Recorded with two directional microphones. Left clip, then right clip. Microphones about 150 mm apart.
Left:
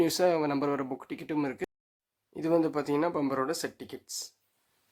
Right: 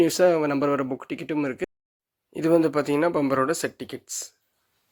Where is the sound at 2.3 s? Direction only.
30° right (ahead or behind).